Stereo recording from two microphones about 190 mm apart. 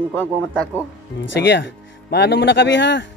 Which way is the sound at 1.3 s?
65° left (ahead or behind).